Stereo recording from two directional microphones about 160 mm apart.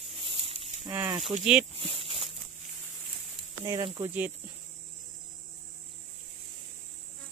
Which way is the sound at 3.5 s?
20° right (ahead or behind).